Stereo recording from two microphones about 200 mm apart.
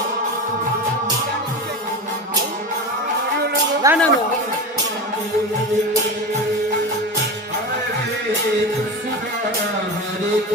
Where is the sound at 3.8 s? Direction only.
15° right (ahead or behind).